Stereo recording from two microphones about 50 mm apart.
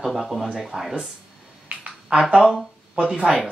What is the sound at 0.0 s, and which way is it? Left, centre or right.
Speech, centre.